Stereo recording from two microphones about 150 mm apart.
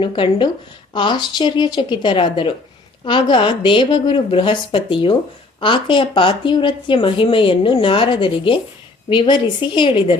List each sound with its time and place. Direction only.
0.0 s a woman's voice: 35° left (ahead or behind)